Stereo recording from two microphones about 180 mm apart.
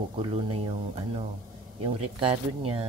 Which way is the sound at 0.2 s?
30° right (ahead or behind).